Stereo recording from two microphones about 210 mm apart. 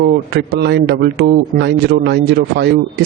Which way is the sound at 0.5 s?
50° right (ahead or behind).